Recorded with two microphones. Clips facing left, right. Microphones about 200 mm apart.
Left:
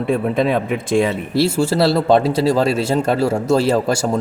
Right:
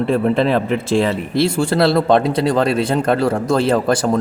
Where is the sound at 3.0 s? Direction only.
25° left (ahead or behind).